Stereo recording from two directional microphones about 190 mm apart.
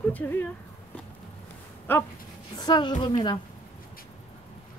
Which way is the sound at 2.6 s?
25° left (ahead or behind).